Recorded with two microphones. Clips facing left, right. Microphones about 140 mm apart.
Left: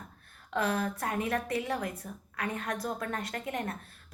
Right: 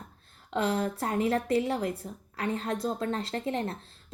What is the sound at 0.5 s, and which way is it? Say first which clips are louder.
A woman's voice: right 2 dB; 25° right (ahead or behind).